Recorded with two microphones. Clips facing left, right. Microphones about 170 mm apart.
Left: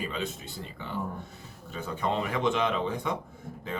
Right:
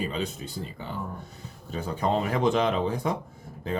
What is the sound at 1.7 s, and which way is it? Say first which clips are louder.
Speech: right 4 dB; 35° right (ahead or behind).